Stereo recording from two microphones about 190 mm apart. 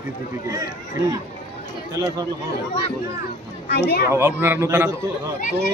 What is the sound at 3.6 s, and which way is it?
Speech, 60° left (ahead or behind).